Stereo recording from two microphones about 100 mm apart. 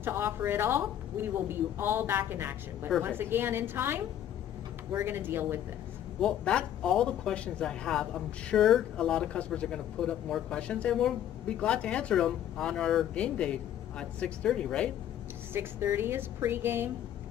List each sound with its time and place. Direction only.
0.0 s speech: 20° right (ahead or behind)
6.2 s speech: 10° left (ahead or behind)
15.5 s speech: 20° right (ahead or behind)